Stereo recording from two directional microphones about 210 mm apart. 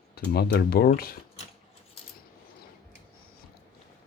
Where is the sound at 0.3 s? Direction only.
50° left (ahead or behind).